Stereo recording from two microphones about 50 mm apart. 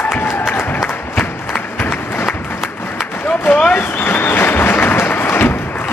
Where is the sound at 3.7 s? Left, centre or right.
Left.